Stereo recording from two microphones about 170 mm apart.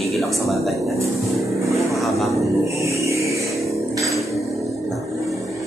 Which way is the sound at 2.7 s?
15° right (ahead or behind).